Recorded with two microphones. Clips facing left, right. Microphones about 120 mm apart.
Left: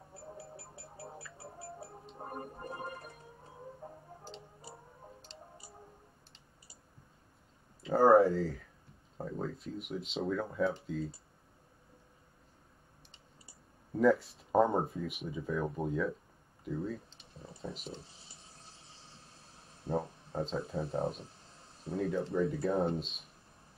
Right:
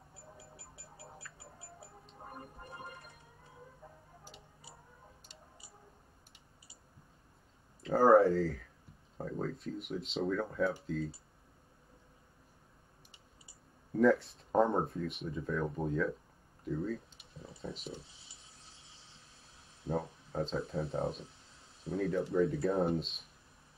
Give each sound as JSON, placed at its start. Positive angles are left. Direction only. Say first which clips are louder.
{"t": 0.4, "sound": "a sound", "louder": "left 7 dB", "side_deg": 40}
{"t": 1.4, "sound": "music", "louder": "left 7 dB", "side_deg": 40}
{"t": 3.8, "sound": "tick-tock", "louder": "left 7 dB", "side_deg": 40}
{"t": 7.8, "sound": "speech", "louder": "left 1 dB", "side_deg": 0}
{"t": 13.9, "sound": "speech", "louder": "even", "side_deg": 0}
{"t": 16.6, "sound": "a sound", "louder": "right 1 dB", "side_deg": 0}
{"t": 17.6, "sound": "speech", "louder": "left 1 dB", "side_deg": 0}
{"t": 19.9, "sound": "speech", "louder": "left 1 dB", "side_deg": 0}